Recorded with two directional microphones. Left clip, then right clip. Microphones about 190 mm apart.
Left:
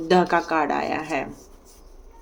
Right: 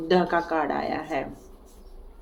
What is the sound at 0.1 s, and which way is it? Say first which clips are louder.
Speech: left 3 dB; 40° left (ahead or behind).